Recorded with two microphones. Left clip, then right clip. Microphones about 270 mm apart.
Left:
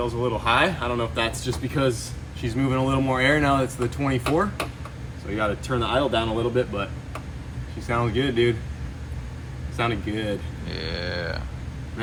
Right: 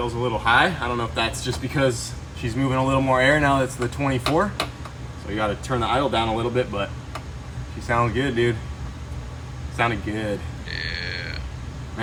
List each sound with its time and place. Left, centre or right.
0.0 s speech: centre
7.9 s speech: centre
9.7 s speech: centre
10.7 s grunt: centre